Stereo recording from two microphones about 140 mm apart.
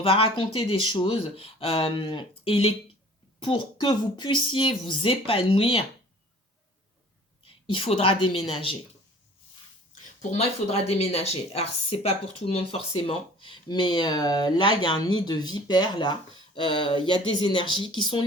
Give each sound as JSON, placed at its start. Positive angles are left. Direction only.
{"t": 0.0, "sound": "speech", "side_deg": 40}
{"t": 7.4, "sound": "a woman's voice", "side_deg": 40}
{"t": 10.2, "sound": "speech", "side_deg": 50}